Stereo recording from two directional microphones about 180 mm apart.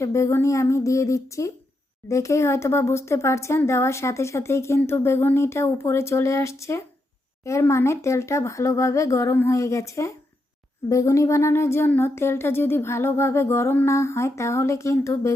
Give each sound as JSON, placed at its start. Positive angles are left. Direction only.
{"t": 0.0, "sound": "speech", "side_deg": 15}